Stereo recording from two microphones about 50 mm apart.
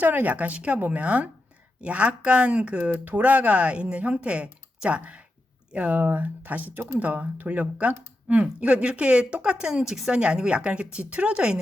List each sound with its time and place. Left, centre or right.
0.0 s speech: right
2.9 s speech: right
6.0 s speech: right